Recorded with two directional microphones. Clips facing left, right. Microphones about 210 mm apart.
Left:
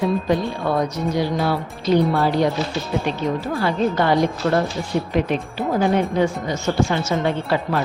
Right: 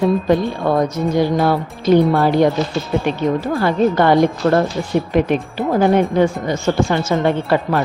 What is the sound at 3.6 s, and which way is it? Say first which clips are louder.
Speech: right 5 dB; 50° right (ahead or behind).